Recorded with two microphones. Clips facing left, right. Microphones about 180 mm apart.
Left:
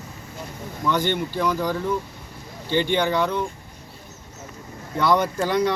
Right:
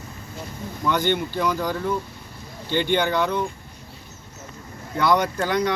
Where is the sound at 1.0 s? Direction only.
5° left (ahead or behind).